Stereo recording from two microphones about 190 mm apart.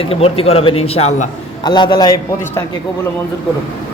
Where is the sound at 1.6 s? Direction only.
20° left (ahead or behind).